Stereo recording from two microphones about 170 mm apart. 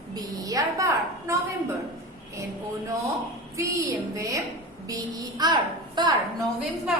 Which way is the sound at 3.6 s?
20° right (ahead or behind).